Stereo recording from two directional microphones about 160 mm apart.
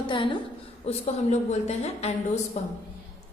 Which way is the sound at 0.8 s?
45° left (ahead or behind).